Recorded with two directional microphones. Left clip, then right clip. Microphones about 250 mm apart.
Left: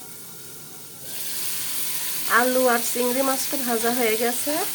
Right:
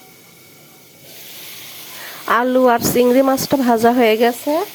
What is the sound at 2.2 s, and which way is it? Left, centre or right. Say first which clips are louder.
Speech: right 6 dB; right.